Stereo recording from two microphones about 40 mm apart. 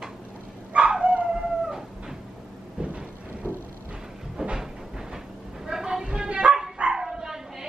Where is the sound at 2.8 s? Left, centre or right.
Right.